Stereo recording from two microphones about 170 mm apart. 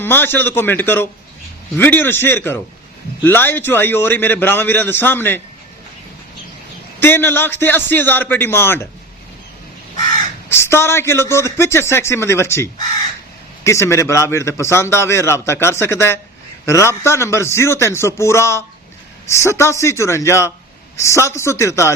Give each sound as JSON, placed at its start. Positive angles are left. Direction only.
{"t": 0.0, "sound": "a man's voice", "side_deg": 10}
{"t": 7.0, "sound": "a man's voice", "side_deg": 10}
{"t": 10.5, "sound": "a man's voice", "side_deg": 15}
{"t": 13.7, "sound": "a man's voice", "side_deg": 15}